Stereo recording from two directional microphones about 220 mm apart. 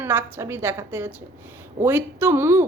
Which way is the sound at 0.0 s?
10° right (ahead or behind).